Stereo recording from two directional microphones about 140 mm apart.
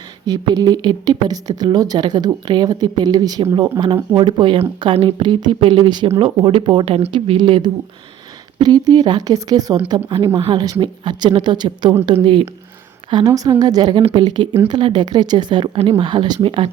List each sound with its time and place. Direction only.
0.3 s a woman's voice: 30° right (ahead or behind)
14.0 s speech: 40° right (ahead or behind)